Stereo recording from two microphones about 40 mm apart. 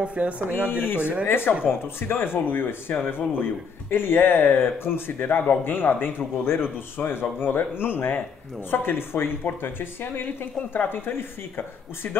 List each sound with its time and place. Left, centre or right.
0.0 s speech: right
0.7 s speech: left
9.4 s speech: left
10.9 s speech: left